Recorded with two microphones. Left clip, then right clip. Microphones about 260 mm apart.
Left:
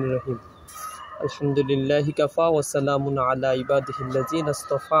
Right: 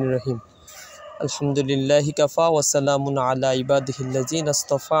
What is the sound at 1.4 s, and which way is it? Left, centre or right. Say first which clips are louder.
Speech: even; right.